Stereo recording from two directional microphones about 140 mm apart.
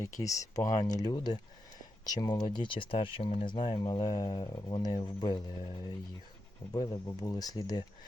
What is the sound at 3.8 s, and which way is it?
Speech, 25° left (ahead or behind).